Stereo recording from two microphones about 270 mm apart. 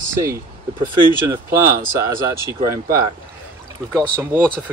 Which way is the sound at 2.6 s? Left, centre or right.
Centre.